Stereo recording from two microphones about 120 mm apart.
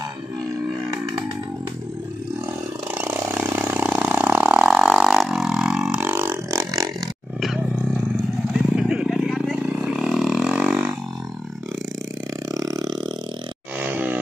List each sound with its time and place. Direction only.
2.9 s vehicle: 20° right (ahead or behind)
5.9 s vehicle: 20° right (ahead or behind)
7.4 s roar: 5° right (ahead or behind)
8.5 s vehicle: 5° right (ahead or behind)
9.6 s roar: 10° right (ahead or behind)
12.4 s burping: 30° right (ahead or behind)
13.7 s vehicle: 15° right (ahead or behind)